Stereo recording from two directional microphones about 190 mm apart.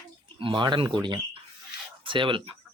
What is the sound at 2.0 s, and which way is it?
Speech, 25° right (ahead or behind).